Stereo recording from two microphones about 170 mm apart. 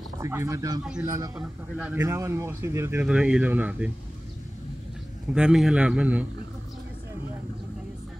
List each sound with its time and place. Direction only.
0.2 s speech: 15° right (ahead or behind)
5.3 s speech: 5° right (ahead or behind)